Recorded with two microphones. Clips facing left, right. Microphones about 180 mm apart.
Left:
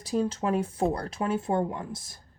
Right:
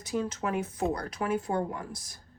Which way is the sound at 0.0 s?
30° left (ahead or behind).